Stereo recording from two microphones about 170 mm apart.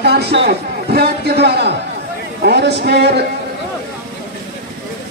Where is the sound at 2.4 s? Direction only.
85° right.